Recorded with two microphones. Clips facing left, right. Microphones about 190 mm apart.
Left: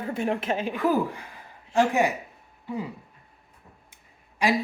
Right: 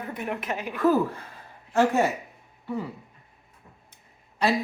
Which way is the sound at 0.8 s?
15° left (ahead or behind).